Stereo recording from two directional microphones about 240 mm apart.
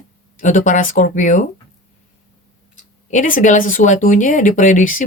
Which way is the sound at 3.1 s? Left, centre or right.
Left.